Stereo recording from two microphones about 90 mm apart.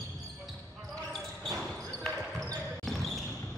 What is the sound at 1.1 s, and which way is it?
Basketball bounce, 5° left (ahead or behind).